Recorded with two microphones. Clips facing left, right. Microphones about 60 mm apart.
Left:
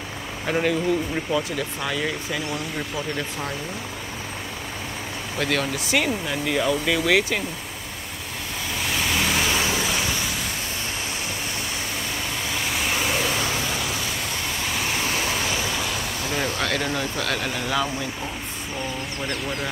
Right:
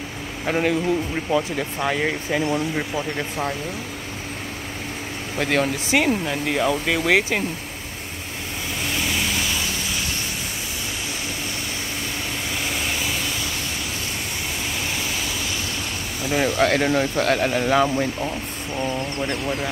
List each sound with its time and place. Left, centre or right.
0.5 s speech: centre
5.4 s speech: right
6.2 s speech: centre
16.3 s speech: centre